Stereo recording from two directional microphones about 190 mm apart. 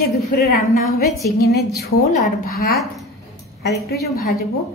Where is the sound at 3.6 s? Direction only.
60° left (ahead or behind).